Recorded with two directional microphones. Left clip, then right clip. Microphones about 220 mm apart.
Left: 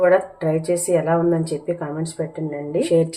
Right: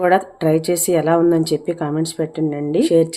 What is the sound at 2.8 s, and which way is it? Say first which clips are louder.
Speech: right 3 dB; 35° right (ahead or behind).